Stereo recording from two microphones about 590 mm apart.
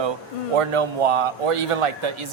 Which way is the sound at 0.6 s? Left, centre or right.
Right.